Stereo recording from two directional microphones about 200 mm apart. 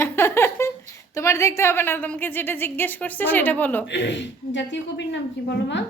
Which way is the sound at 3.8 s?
60° left (ahead or behind).